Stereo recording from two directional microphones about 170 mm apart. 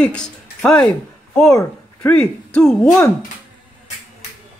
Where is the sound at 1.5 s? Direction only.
20° left (ahead or behind).